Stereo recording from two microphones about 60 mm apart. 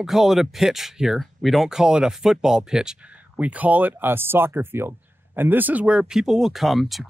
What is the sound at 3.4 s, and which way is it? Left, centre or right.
Speech, right.